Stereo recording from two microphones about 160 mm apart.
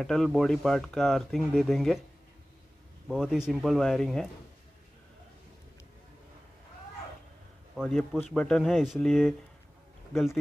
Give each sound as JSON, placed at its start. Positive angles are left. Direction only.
{"t": 0.0, "sound": "speech", "side_deg": 5}
{"t": 3.1, "sound": "speech", "side_deg": 0}
{"t": 7.7, "sound": "speech", "side_deg": 5}